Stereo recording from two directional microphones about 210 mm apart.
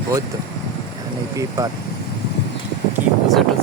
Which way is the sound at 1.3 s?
15° right (ahead or behind).